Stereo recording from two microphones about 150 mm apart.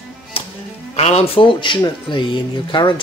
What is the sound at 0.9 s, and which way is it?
Speech, 45° left (ahead or behind).